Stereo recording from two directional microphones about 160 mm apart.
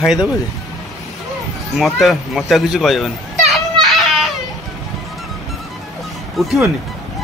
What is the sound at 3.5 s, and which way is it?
Children playing, centre (ahead or behind).